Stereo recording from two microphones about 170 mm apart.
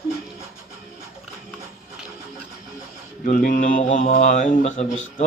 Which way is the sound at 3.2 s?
55° left (ahead or behind).